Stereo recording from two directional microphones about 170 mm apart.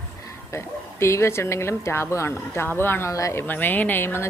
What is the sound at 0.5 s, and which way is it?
A woman's voice, 15° left (ahead or behind).